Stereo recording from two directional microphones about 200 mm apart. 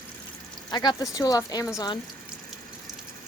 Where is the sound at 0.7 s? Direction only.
20° left (ahead or behind).